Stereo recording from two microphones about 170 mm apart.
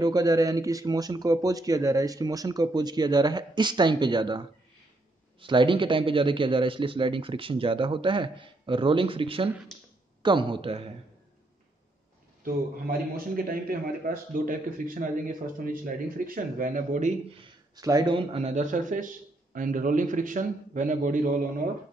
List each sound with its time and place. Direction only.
0.0 s a man's voice: 20° right (ahead or behind)
13.1 s a man's voice: 60° right (ahead or behind)
17.3 s a sound: 30° right (ahead or behind)
17.8 s a man's voice: 25° right (ahead or behind); by 21.4 s 50° right (ahead or behind)